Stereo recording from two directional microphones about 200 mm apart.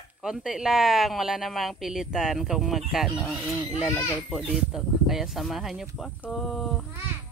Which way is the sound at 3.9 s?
10° left (ahead or behind).